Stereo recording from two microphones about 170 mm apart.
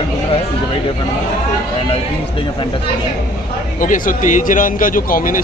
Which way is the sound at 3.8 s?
50° left (ahead or behind).